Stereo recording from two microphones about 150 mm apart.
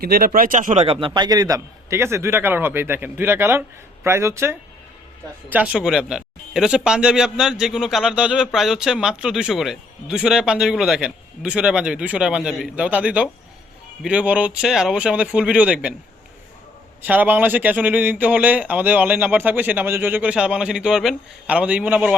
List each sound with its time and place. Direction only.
0.0 s a man's voice: 90° right; by 16.0 s 10° right (ahead or behind)
17.0 s speech: 10° right (ahead or behind)